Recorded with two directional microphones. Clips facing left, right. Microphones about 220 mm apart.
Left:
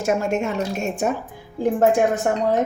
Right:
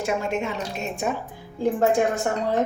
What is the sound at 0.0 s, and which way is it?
A woman's voice, 45° left (ahead or behind).